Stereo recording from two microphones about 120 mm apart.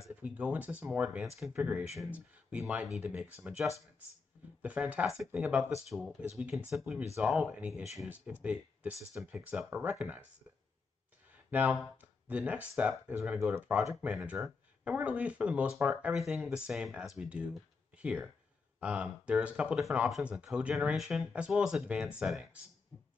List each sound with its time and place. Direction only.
0.1 s speech: 10° right (ahead or behind)
5.9 s speech: centre (ahead or behind)
11.5 s speech: 15° right (ahead or behind)
22.9 s a sound: 35° left (ahead or behind)